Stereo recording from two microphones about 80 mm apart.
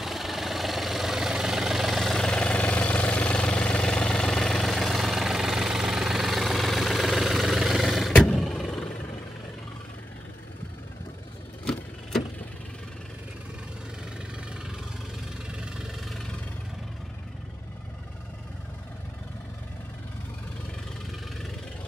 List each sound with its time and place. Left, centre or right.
0.0 s vehicle: centre